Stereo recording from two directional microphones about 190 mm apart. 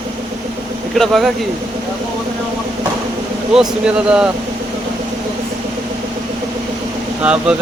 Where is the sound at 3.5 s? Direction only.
5° right (ahead or behind).